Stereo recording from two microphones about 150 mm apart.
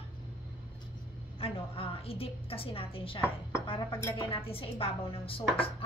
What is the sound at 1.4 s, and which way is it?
A woman's voice, 40° left (ahead or behind).